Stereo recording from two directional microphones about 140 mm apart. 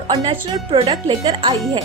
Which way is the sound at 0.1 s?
35° right (ahead or behind).